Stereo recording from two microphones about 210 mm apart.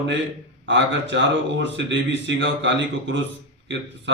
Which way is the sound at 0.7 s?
60° right (ahead or behind).